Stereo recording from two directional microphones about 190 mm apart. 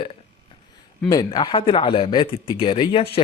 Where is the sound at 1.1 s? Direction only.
20° left (ahead or behind).